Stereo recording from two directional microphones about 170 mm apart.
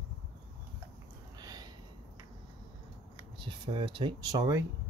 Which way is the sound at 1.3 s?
25° right (ahead or behind).